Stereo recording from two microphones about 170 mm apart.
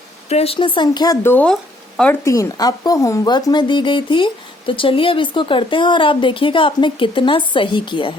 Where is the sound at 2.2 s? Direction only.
20° left (ahead or behind).